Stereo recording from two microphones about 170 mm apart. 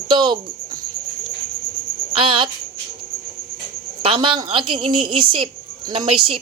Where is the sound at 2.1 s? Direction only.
30° right (ahead or behind).